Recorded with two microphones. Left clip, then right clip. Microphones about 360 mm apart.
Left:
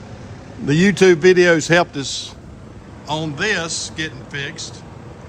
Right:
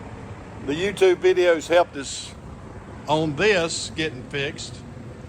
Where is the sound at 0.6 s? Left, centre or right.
Left.